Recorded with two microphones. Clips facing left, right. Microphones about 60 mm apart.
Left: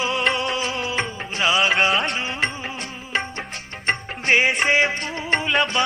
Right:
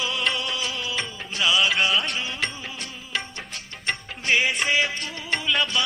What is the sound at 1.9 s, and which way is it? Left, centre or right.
Music, left.